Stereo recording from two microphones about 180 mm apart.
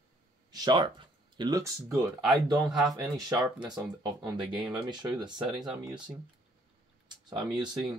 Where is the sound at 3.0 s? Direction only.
20° right (ahead or behind).